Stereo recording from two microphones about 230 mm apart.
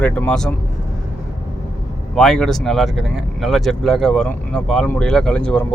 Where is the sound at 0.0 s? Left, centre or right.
Centre.